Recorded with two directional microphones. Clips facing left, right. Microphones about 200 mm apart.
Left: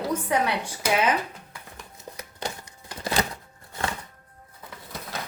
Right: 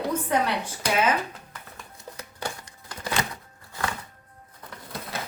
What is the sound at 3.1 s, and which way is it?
Music, 30° left (ahead or behind).